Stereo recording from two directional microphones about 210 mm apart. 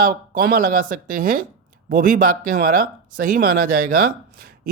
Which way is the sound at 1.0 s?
40° right (ahead or behind).